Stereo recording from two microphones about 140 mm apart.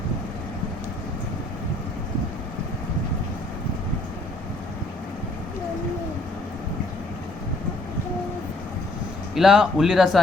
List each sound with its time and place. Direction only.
9.3 s speech: 5° right (ahead or behind)